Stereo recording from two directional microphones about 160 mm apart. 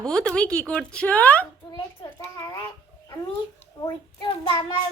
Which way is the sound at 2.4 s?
25° left (ahead or behind).